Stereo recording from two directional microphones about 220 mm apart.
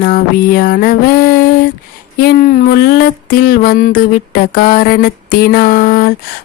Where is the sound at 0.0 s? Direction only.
40° left (ahead or behind).